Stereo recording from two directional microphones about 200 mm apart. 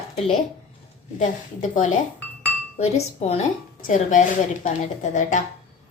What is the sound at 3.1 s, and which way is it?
A woman's voice, 30° left (ahead or behind).